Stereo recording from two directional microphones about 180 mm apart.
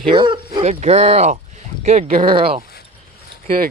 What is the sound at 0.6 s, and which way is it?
Speech, 35° right (ahead or behind).